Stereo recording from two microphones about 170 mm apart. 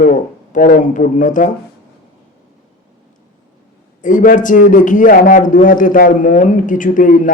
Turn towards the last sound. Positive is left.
turn(degrees=50)  # may be behind; listen again after turning